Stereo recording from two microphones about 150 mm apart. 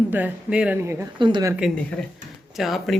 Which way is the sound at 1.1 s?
30° right (ahead or behind).